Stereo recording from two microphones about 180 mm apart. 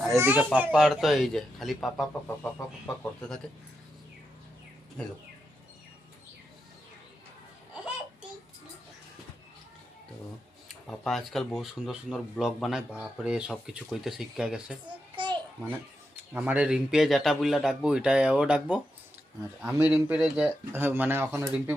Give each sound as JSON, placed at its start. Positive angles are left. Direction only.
{"t": 0.1, "sound": "speech", "side_deg": -15}
{"t": 2.2, "sound": "speech", "side_deg": 10}
{"t": 10.7, "sound": "speech", "side_deg": 0}
{"t": 15.1, "sound": "babbling", "side_deg": -25}
{"t": 16.1, "sound": "speech", "side_deg": -10}